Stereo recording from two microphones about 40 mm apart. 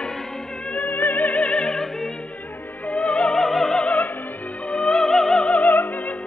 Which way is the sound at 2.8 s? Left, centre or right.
Left.